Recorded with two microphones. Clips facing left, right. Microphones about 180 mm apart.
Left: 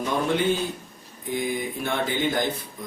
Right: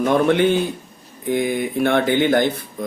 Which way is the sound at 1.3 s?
70° right (ahead or behind).